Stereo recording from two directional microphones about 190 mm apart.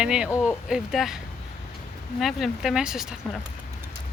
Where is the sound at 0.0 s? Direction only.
5° right (ahead or behind).